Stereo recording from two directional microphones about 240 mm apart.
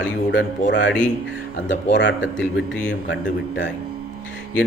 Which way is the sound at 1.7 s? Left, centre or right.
Left.